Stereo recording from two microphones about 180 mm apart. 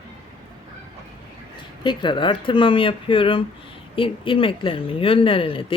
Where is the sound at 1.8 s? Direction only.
25° left (ahead or behind).